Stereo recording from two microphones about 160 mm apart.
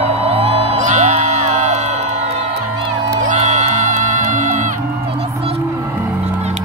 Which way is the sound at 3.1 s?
50° right (ahead or behind).